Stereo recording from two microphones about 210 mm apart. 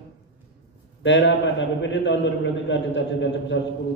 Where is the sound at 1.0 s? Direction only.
60° left (ahead or behind).